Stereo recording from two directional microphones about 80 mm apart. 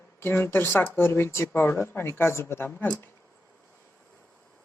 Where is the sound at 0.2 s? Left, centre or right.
Left.